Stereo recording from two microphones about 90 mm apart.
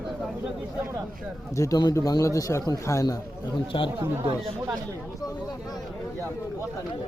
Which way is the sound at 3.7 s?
75° left (ahead or behind).